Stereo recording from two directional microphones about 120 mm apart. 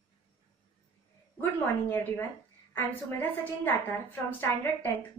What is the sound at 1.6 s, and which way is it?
A woman's voice, 15° left (ahead or behind).